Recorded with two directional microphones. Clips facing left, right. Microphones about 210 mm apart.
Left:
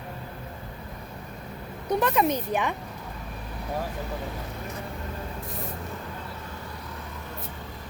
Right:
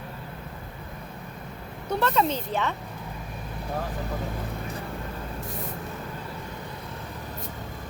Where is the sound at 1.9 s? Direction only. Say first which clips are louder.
Left 1 dB; 15° left (ahead or behind).